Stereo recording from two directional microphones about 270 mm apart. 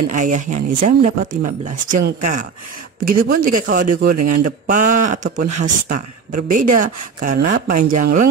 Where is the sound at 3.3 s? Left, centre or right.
Right.